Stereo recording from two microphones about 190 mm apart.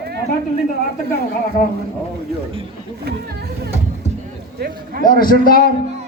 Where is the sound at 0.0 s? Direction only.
60° right (ahead or behind).